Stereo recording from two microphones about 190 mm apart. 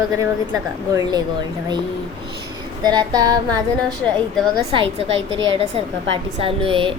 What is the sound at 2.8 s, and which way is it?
A woman's voice, 20° right (ahead or behind).